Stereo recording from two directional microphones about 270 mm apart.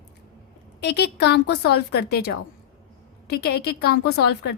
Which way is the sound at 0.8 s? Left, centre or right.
Left.